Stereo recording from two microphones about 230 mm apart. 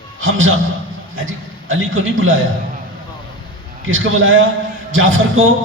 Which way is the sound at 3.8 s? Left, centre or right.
Right.